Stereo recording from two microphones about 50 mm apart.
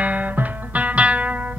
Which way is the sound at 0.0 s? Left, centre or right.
Right.